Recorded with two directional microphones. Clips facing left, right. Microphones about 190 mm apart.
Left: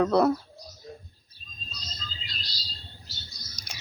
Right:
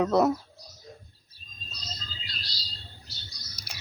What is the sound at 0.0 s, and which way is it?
Speech, 20° right (ahead or behind).